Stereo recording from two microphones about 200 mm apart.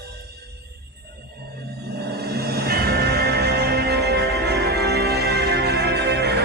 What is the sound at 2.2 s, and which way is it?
Music, 50° right (ahead or behind).